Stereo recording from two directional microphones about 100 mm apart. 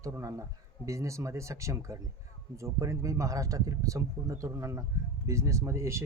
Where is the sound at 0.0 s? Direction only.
30° right (ahead or behind).